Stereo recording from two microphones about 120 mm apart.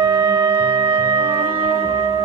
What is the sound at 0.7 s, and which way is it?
Music, 50° right (ahead or behind).